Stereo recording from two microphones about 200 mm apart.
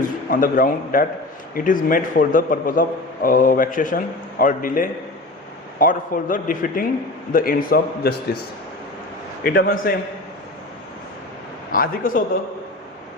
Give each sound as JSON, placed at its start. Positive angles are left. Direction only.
{"t": 0.0, "sound": "a man's voice", "side_deg": 45}
{"t": 9.4, "sound": "a man's voice", "side_deg": 50}
{"t": 11.7, "sound": "a man's voice", "side_deg": 45}